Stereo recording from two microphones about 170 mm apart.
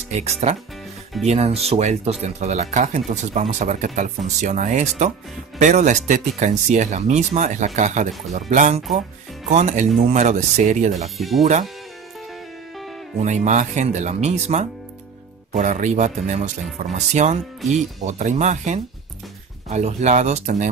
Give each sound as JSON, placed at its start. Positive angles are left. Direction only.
{"t": 0.1, "sound": "speech", "side_deg": -40}
{"t": 11.1, "sound": "speech", "side_deg": 0}
{"t": 13.2, "sound": "speech", "side_deg": -45}